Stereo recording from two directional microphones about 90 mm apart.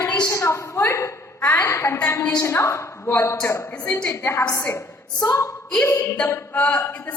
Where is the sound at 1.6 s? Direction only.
30° left (ahead or behind).